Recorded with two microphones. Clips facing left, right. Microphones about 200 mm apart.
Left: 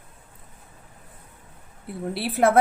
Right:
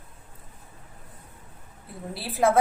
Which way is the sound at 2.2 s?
65° left (ahead or behind).